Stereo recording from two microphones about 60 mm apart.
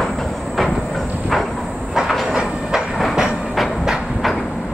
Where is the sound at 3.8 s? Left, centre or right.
Centre.